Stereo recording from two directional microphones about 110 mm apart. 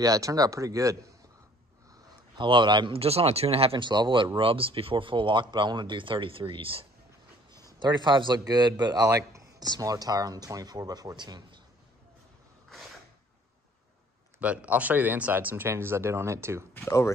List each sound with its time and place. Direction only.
0.0 s a man's voice: 30° right (ahead or behind)
2.3 s speech: 45° right (ahead or behind)
3.0 s speech: 65° right (ahead or behind)
3.7 s speech: 45° right (ahead or behind)
7.5 s a man's voice: 40° right (ahead or behind)
14.4 s speech: 10° right (ahead or behind)
16.7 s speech: 25° left (ahead or behind)